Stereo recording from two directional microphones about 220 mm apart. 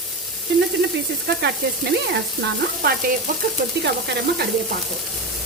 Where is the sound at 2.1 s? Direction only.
50° right (ahead or behind).